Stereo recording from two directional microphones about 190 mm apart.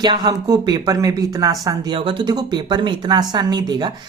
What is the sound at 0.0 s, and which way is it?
Speech, 20° right (ahead or behind).